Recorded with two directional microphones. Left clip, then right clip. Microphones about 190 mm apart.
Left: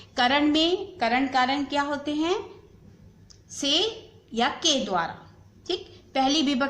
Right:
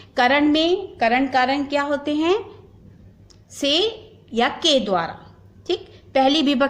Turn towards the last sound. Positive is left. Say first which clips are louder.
# right 6 dB
turn(degrees=-40)  # may be behind; listen again after turning